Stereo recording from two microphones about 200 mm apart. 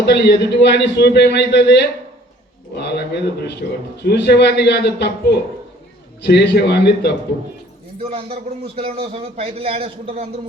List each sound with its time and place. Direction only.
0.0 s a man's voice: 55° left (ahead or behind)
4.0 s a man's voice: 55° left (ahead or behind)
8.0 s a man's voice: 30° right (ahead or behind)